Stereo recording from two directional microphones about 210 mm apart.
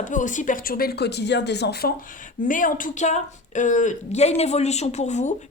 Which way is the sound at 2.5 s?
40° left (ahead or behind).